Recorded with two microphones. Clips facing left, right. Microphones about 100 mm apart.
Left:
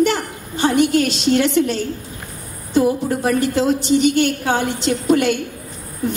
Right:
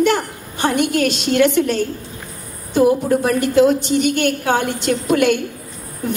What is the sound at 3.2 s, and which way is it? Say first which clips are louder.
A woman's voice: right 3 dB; 50° right (ahead or behind).